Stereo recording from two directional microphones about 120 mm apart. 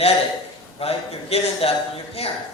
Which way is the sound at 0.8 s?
55° left (ahead or behind).